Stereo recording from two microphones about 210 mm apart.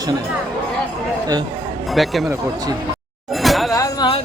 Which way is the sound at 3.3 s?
Centre (ahead or behind).